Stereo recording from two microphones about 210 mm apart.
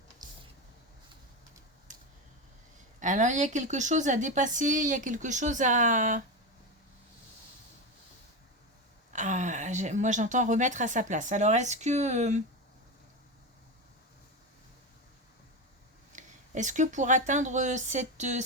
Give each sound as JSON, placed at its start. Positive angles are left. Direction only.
{"t": 0.2, "sound": "a sound", "side_deg": -20}
{"t": 3.0, "sound": "a woman's voice", "side_deg": -35}
{"t": 9.1, "sound": "a woman's voice", "side_deg": -35}
{"t": 16.1, "sound": "speech", "side_deg": -35}